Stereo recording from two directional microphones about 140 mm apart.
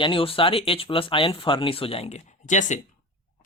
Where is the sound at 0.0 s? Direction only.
40° left (ahead or behind); by 2.8 s 60° left (ahead or behind).